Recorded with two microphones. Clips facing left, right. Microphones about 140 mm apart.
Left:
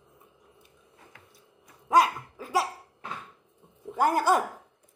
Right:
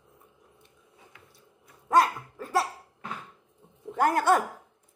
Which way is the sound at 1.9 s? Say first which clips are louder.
Even; centre (ahead or behind).